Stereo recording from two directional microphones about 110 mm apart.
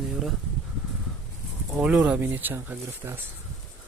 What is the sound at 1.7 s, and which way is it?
Speech, 10° right (ahead or behind).